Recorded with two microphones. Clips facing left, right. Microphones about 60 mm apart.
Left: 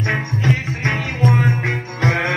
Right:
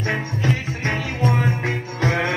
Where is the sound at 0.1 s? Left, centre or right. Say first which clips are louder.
Left 3 dB; left.